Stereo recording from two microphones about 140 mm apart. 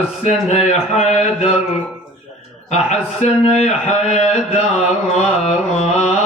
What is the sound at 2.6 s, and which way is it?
A man's voice, 50° left (ahead or behind).